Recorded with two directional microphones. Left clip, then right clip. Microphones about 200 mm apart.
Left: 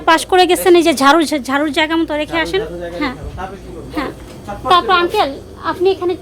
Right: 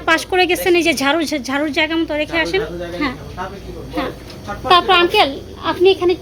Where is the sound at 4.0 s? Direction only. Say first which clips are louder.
Left 1 dB; 10° left (ahead or behind).